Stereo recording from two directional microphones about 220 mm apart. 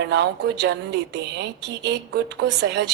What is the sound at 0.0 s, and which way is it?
A woman's voice, 50° right (ahead or behind).